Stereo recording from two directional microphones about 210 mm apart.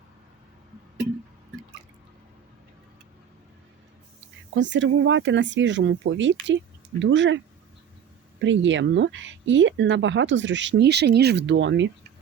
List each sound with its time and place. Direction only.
4.5 s speech: 60° right (ahead or behind)